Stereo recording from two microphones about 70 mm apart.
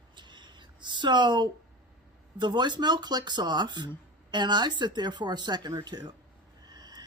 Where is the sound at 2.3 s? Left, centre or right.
Right.